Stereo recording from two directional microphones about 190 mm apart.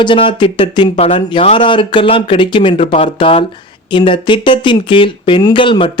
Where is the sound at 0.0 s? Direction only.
25° left (ahead or behind).